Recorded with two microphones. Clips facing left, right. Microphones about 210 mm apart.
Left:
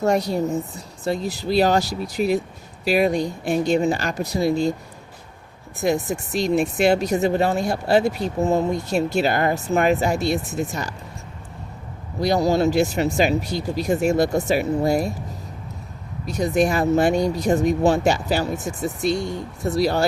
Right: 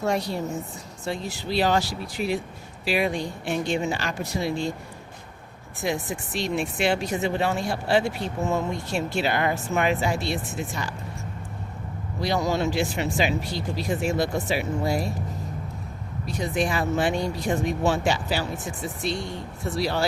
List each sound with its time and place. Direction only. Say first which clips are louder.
0.0 s speech: left 6 dB; 40° left (ahead or behind)
5.8 s speech: left 6 dB; 40° left (ahead or behind)
12.2 s speech: left 6 dB; 40° left (ahead or behind)
16.2 s speech: left 6 dB; 40° left (ahead or behind)